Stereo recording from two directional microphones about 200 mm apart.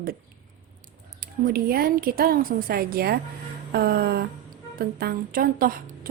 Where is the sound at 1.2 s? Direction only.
45° right (ahead or behind).